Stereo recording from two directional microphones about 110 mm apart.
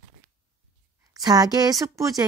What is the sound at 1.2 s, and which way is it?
Speech, 35° right (ahead or behind).